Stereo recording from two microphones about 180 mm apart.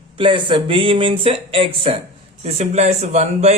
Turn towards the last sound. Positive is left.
turn(degrees=-35)  # may be behind; listen again after turning